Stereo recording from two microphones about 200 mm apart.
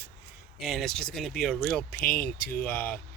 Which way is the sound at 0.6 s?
Centre (ahead or behind).